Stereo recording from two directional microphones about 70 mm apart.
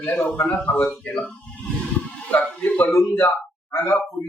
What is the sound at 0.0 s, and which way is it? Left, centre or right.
Speech, left.